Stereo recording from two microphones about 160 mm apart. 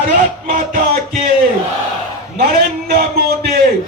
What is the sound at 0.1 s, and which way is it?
Music, 55° right (ahead or behind).